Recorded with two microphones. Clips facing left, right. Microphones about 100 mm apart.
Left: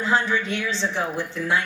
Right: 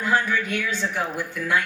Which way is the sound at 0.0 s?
25° left (ahead or behind).